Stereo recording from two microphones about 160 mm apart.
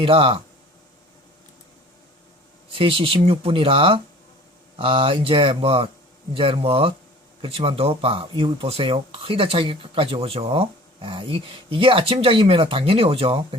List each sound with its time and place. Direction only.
0.0 s speech: 35° right (ahead or behind)
2.6 s speech: 35° right (ahead or behind)